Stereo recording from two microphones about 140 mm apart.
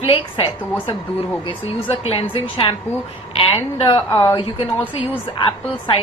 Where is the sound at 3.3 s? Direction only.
40° left (ahead or behind).